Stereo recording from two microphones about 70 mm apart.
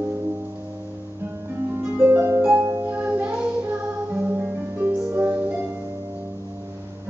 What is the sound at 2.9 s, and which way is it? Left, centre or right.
Music, right.